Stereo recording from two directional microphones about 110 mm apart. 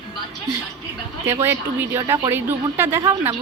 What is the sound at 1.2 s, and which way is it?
A woman's voice, 20° right (ahead or behind).